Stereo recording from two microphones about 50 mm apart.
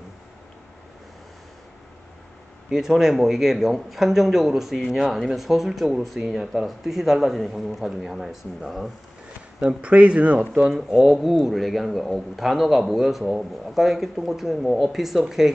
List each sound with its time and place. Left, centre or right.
2.7 s a man's voice: centre
9.6 s speech: right
11.0 s a man's voice: centre